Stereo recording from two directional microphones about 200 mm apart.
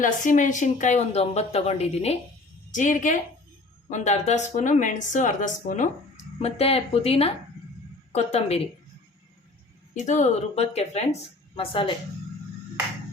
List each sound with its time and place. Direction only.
0.0 s speech: 40° left (ahead or behind)
9.9 s speech: 40° left (ahead or behind)